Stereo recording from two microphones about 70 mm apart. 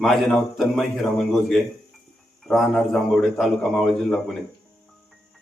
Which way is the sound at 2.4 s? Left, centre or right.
Centre.